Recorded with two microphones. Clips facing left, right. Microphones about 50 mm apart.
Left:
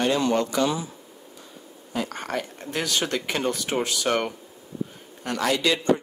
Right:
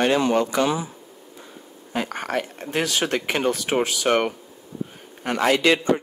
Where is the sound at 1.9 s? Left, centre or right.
Right.